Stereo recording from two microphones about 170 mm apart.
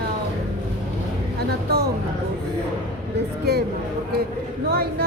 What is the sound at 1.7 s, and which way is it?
Speech, 70° right (ahead or behind).